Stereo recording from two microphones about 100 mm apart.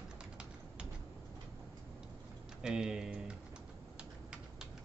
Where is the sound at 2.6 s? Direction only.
5° right (ahead or behind).